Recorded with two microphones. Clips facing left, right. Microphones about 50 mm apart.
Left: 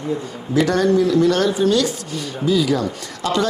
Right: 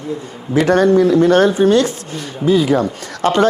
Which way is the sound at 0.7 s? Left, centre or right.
Right.